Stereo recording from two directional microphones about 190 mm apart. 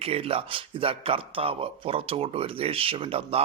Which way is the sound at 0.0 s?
30° right (ahead or behind).